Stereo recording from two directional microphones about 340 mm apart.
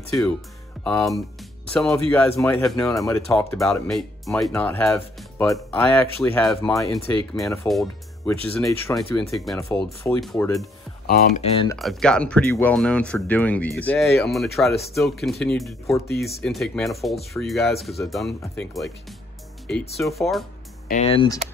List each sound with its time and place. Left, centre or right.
0.1 s speech: centre
11.1 s speech: left
11.8 s speech: centre
20.9 s speech: centre